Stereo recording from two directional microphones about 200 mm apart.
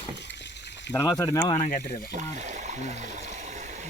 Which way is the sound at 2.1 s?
35° right (ahead or behind).